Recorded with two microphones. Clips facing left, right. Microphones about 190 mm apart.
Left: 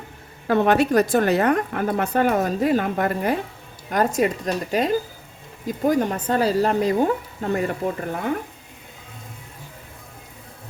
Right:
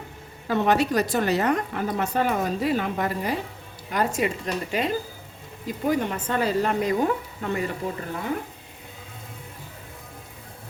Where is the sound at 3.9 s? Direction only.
45° left (ahead or behind).